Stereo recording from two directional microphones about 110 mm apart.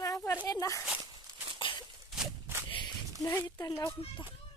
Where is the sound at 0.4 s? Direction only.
30° left (ahead or behind).